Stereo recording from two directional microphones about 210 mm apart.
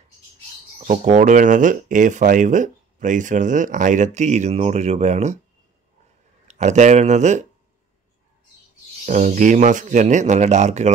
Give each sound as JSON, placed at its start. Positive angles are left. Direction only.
{"t": 0.8, "sound": "speech", "side_deg": -35}
{"t": 6.4, "sound": "speech", "side_deg": -35}
{"t": 9.0, "sound": "speech", "side_deg": -35}